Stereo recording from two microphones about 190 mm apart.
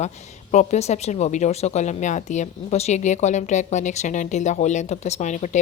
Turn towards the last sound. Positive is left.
turn(degrees=40)  # may be behind; listen again after turning